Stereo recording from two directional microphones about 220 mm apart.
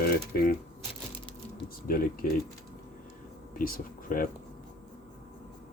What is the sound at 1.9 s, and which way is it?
Speech, 40° left (ahead or behind).